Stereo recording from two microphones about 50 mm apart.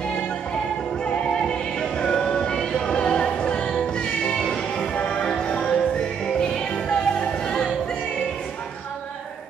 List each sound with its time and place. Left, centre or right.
1.8 s music: centre